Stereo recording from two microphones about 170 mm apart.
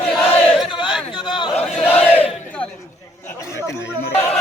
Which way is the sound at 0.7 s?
25° left (ahead or behind).